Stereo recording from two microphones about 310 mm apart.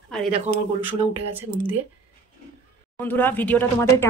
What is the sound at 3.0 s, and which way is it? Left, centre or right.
Speech, centre.